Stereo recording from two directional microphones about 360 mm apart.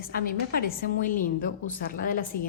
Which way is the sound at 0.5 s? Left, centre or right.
Left.